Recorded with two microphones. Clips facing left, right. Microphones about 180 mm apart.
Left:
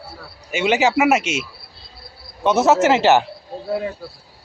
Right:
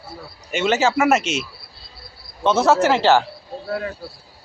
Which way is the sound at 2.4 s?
20° left (ahead or behind).